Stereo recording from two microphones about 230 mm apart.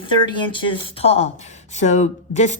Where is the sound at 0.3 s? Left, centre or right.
Left.